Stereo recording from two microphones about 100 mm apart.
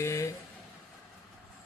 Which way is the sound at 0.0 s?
30° left (ahead or behind).